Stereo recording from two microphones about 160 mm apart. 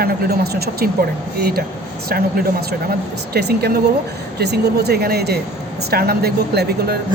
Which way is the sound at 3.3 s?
85° right.